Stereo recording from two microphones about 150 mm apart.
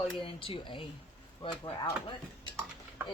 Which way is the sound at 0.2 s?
35° left (ahead or behind).